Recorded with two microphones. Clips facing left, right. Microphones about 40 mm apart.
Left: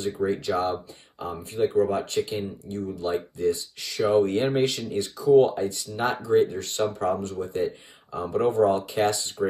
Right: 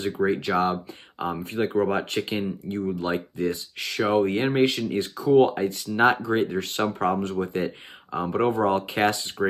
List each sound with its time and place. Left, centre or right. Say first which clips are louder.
0.0 s speech: right 2 dB; right
4.3 s speech: right 1 dB; right
8.1 s speech: right 1 dB; right